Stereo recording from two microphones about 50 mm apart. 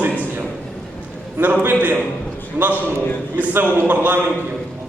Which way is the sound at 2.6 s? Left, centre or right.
Right.